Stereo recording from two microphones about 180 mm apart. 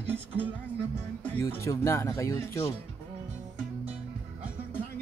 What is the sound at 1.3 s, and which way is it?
Speech, 15° left (ahead or behind).